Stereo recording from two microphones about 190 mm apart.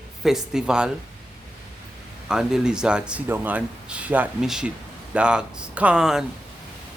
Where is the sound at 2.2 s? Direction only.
5° right (ahead or behind).